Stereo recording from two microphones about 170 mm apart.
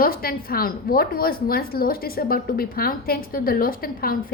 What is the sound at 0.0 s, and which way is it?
A woman's voice, 60° left (ahead or behind).